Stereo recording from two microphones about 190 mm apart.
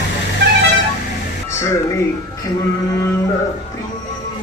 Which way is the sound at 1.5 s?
15° left (ahead or behind).